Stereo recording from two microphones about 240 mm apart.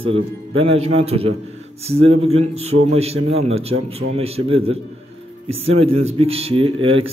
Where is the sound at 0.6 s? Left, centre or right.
Right.